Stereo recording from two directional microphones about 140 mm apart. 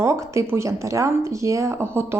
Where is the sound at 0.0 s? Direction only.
20° right (ahead or behind).